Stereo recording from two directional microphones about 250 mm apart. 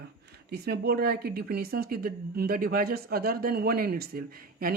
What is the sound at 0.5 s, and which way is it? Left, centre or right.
A woman's voice, right.